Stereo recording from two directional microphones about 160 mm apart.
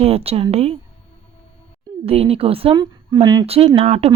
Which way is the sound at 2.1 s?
35° right (ahead or behind).